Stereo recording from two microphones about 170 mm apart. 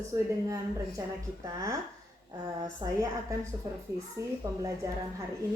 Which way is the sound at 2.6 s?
20° right (ahead or behind).